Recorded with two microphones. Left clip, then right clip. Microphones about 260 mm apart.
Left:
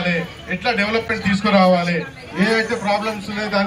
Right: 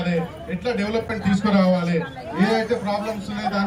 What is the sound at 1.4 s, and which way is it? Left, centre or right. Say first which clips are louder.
Speech: left 6 dB; left.